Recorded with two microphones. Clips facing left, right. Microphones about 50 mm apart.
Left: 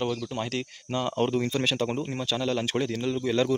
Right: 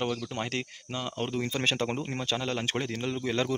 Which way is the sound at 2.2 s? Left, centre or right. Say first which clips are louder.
Left 3 dB; right.